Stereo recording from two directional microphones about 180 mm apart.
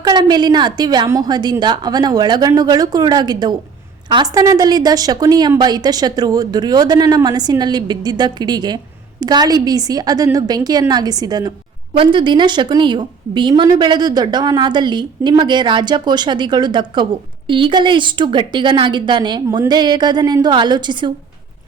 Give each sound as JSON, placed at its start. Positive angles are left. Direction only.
{"t": 0.0, "sound": "a woman's voice", "side_deg": -25}